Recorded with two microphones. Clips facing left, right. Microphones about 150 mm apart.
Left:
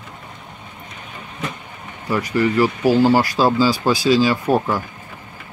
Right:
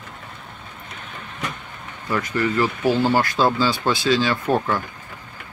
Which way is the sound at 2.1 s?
10° left (ahead or behind).